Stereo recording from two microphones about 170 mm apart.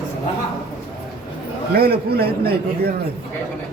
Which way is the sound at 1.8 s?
65° right (ahead or behind).